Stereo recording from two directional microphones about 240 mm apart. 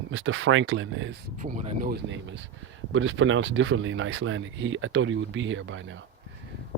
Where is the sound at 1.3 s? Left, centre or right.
Right.